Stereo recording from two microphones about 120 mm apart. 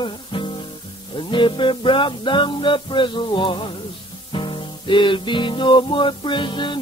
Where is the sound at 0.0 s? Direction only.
45° left (ahead or behind).